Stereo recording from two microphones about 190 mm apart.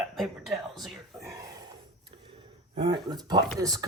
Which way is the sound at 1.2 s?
15° right (ahead or behind).